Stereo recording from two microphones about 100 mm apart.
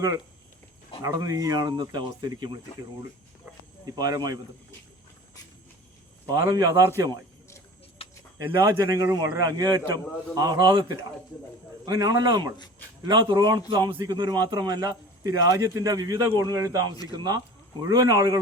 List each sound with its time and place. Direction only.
1.0 s speech: 35° right (ahead or behind)
3.9 s speech: 40° right (ahead or behind)
6.2 s speech: 40° right (ahead or behind)
8.0 s a sound: 75° left (ahead or behind)
8.4 s speech: 25° right (ahead or behind)
8.8 s speech: 35° right (ahead or behind)
11.9 s speech: 35° right (ahead or behind)